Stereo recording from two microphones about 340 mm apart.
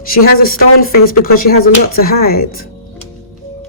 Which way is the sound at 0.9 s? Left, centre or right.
Left.